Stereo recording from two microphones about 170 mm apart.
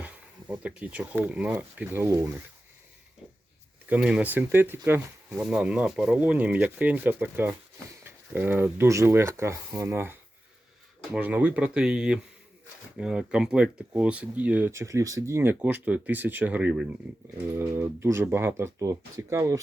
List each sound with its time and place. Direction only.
0.0 s speech: 10° right (ahead or behind)
3.8 s speech: 5° right (ahead or behind)